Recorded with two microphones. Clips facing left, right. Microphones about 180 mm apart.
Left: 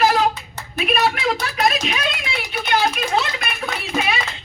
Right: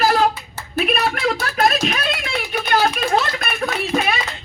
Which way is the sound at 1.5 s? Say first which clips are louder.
Right 4 dB; 50° right (ahead or behind).